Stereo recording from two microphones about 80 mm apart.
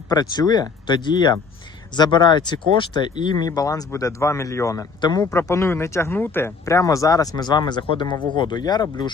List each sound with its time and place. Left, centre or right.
0.1 s speech: left
4.9 s a man's voice: left
5.4 s speech: left
6.7 s speech: left
8.4 s speech: left